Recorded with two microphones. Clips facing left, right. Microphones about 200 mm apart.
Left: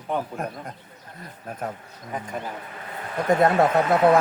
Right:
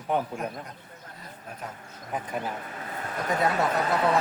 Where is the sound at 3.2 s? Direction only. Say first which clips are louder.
Left 7 dB; 50° left (ahead or behind).